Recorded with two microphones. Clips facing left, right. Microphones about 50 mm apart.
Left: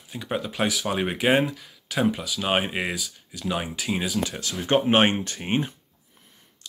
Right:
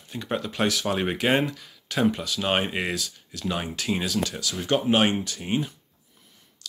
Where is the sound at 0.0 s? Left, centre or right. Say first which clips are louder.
Even; centre.